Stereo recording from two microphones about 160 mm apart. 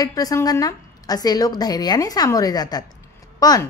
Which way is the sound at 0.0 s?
20° left (ahead or behind).